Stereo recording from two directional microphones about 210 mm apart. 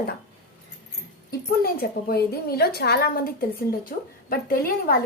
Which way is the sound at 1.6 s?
45° left (ahead or behind).